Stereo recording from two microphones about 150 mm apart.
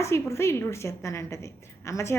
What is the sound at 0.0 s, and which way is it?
A woman's voice, 20° left (ahead or behind).